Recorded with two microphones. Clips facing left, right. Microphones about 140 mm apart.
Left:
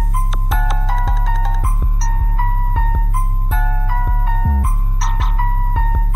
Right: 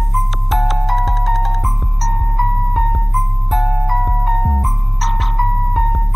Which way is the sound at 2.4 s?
35° right (ahead or behind).